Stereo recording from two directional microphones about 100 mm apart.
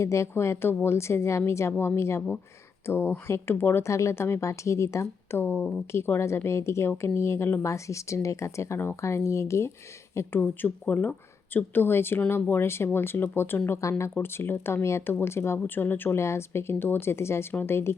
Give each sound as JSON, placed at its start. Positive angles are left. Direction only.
{"t": 0.0, "sound": "speech", "side_deg": 30}
{"t": 10.4, "sound": "speech", "side_deg": 15}